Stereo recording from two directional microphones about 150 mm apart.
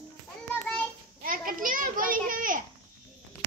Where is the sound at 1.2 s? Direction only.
70° right (ahead or behind).